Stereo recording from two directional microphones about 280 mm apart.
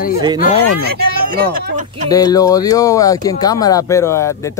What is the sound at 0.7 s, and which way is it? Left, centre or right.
Speech, right.